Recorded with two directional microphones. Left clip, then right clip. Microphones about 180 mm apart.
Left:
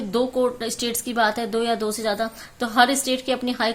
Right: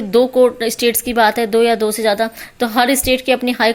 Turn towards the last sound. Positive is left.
turn(degrees=-30)  # may be behind; listen again after turning